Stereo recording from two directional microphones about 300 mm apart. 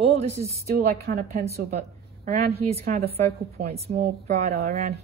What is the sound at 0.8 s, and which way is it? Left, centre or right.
A woman's voice, right.